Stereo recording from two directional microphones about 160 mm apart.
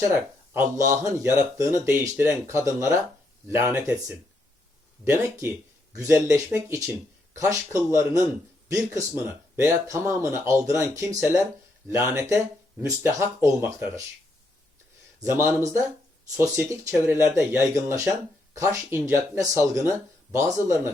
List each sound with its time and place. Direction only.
0.1 s speech: 15° right (ahead or behind)
5.0 s speech: 15° right (ahead or behind)
15.2 s speech: 15° right (ahead or behind)